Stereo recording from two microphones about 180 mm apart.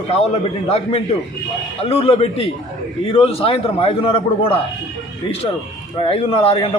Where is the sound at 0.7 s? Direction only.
35° left (ahead or behind).